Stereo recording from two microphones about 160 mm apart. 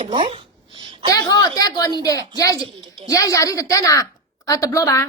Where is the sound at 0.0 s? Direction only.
30° right (ahead or behind).